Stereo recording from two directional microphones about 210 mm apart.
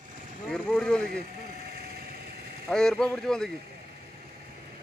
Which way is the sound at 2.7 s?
Centre (ahead or behind).